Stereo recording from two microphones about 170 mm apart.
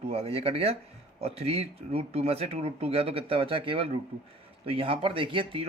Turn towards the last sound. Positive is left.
turn(degrees=-30)  # may be behind; listen again after turning